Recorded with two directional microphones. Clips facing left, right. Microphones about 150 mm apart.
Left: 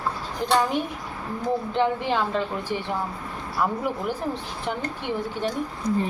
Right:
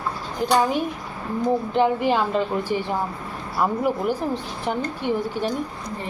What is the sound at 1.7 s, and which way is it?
A woman's voice, 10° right (ahead or behind).